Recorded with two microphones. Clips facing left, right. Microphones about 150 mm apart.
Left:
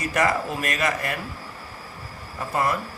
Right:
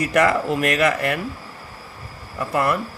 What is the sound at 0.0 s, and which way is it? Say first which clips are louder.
Speech: right 5 dB; 65° right (ahead or behind).